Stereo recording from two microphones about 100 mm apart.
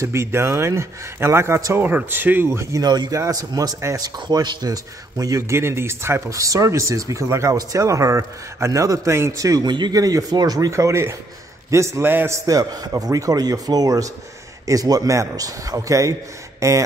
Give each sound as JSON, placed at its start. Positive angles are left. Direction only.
{"t": 0.0, "sound": "speech", "side_deg": -25}
{"t": 5.6, "sound": "speech", "side_deg": -25}
{"t": 12.4, "sound": "speech", "side_deg": -35}